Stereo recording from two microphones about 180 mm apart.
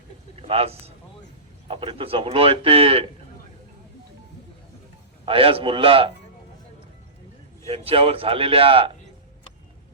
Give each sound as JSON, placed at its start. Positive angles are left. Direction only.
{"t": 0.3, "sound": "a man's voice", "side_deg": -35}
{"t": 5.2, "sound": "a man's voice", "side_deg": -30}
{"t": 7.7, "sound": "a man's voice", "side_deg": -30}